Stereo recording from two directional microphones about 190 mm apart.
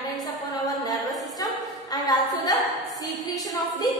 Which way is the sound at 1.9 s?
20° left (ahead or behind).